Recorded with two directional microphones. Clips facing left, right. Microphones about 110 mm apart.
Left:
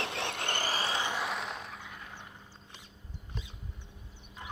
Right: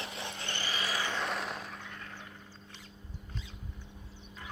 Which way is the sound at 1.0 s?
15° left (ahead or behind).